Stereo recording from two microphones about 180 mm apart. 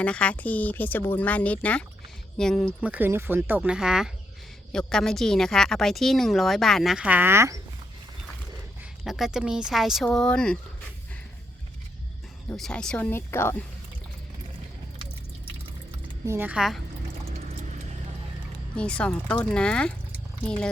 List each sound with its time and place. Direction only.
0.0 s a woman's voice: 5° left (ahead or behind)
2.8 s a woman's voice: 10° right (ahead or behind)
8.8 s a woman's voice: centre (ahead or behind)
12.5 s speech: 5° left (ahead or behind)
16.0 s speech: 15° right (ahead or behind)
17.3 s pour: 40° right (ahead or behind)
18.8 s a woman's voice: 5° left (ahead or behind)